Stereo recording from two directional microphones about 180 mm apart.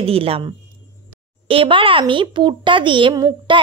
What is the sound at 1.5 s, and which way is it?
A woman's voice, 30° right (ahead or behind).